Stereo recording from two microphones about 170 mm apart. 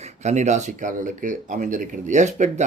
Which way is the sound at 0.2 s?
45° right (ahead or behind).